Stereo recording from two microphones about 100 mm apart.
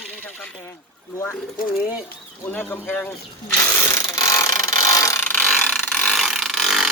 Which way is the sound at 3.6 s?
30° left (ahead or behind).